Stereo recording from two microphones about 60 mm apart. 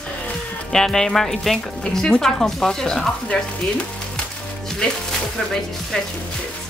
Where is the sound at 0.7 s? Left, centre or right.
Centre.